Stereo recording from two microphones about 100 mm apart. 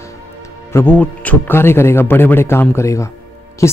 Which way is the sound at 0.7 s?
15° left (ahead or behind).